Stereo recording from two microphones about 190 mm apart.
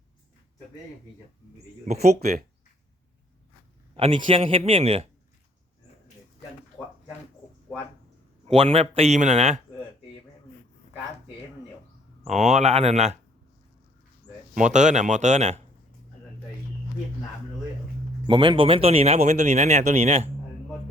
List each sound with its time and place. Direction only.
1.9 s speech: 35° right (ahead or behind)
3.9 s speech: 30° right (ahead or behind)
8.4 s speech: 35° right (ahead or behind)
12.3 s speech: 35° right (ahead or behind)
14.5 s speech: 40° right (ahead or behind)
18.3 s speech: 25° right (ahead or behind)